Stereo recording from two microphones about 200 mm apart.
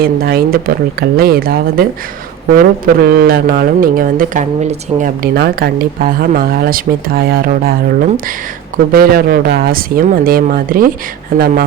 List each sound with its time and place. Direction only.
0.0 s speech: 50° right (ahead or behind)
8.9 s speech: 45° right (ahead or behind)